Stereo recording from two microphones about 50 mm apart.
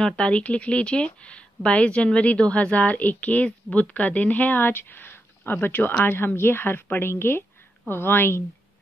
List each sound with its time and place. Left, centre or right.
0.0 s speech: centre; by 8.5 s left